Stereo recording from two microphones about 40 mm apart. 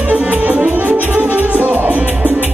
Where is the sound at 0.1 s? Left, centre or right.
Right.